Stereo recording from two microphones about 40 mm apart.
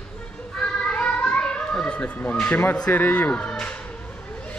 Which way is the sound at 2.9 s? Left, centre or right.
Left.